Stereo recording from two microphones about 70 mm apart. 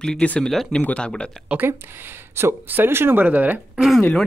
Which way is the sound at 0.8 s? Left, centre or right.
Centre.